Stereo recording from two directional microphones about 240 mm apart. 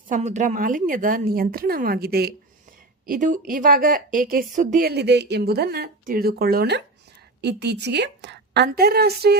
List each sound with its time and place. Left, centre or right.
0.1 s a woman's voice: right